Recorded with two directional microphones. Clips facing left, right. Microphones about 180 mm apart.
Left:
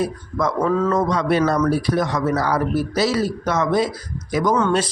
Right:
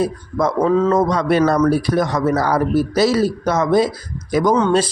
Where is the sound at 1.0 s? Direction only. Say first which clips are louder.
Right 3 dB; 45° right (ahead or behind).